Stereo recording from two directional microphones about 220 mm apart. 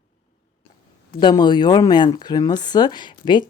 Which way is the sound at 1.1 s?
20° left (ahead or behind).